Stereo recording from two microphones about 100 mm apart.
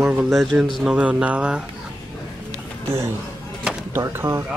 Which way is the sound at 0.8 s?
10° right (ahead or behind).